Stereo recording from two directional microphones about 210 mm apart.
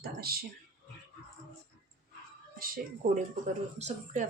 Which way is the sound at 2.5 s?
45° right (ahead or behind).